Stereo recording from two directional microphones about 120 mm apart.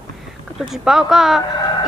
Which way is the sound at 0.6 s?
5° right (ahead or behind).